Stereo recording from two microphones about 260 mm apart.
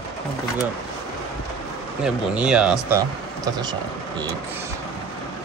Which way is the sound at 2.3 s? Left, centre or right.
Centre.